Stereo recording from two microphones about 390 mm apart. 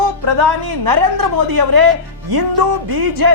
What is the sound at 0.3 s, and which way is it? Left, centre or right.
Speech, right.